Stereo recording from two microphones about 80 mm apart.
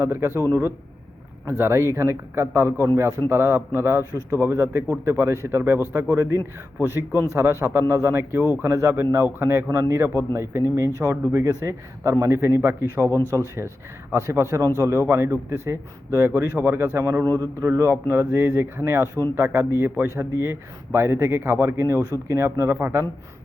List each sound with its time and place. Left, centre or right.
0.0 s speech: right
1.5 s speech: right
17.2 s a man's voice: right
19.2 s speech: centre
19.8 s speech: right